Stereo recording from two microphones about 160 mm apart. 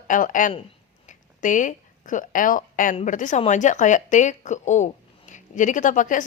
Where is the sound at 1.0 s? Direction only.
50° left (ahead or behind).